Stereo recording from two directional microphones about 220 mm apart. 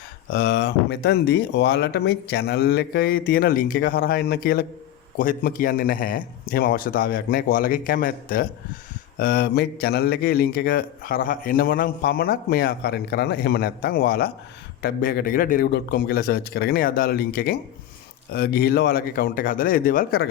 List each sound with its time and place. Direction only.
0.3 s a man's voice: 55° left (ahead or behind)